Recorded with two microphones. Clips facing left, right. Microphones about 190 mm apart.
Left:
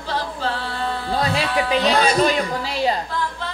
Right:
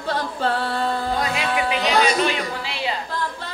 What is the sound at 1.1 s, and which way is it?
A man's voice, 35° left (ahead or behind).